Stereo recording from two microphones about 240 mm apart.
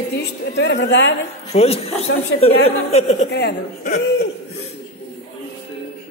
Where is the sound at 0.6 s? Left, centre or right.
Left.